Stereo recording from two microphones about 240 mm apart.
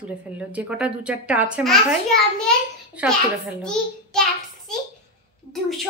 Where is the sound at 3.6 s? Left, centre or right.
Centre.